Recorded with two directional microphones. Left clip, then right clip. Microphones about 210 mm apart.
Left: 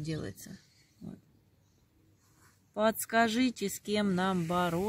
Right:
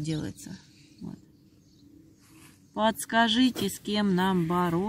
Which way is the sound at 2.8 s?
5° left (ahead or behind).